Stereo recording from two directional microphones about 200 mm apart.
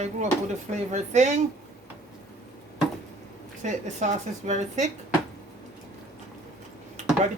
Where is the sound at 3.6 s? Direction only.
35° right (ahead or behind).